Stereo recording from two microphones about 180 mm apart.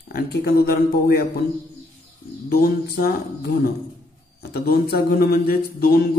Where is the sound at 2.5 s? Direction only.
55° left (ahead or behind).